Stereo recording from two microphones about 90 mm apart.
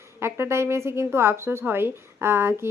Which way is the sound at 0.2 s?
25° right (ahead or behind).